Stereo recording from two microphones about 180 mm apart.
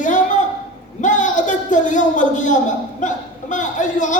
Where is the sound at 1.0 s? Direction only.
45° left (ahead or behind).